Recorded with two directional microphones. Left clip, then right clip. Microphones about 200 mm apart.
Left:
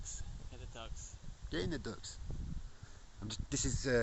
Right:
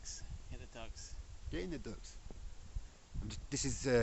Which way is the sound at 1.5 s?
25° left (ahead or behind).